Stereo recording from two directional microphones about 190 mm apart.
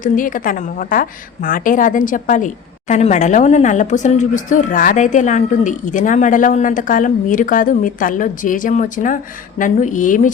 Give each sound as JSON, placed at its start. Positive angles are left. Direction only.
{"t": 0.0, "sound": "speech", "side_deg": 45}